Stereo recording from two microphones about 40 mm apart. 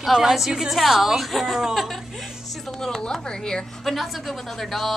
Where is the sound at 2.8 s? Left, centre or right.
Centre.